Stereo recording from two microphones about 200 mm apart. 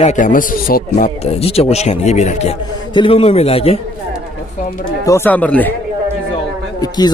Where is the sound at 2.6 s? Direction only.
25° left (ahead or behind).